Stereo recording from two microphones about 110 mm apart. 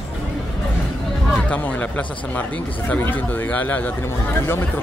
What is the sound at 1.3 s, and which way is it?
Speech, 10° left (ahead or behind).